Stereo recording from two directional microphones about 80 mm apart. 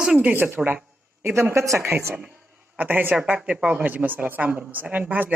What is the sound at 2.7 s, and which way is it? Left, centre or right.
A woman's voice, right.